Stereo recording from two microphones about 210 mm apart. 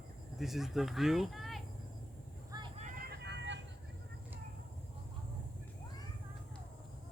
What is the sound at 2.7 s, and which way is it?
Vehicle, 35° right (ahead or behind).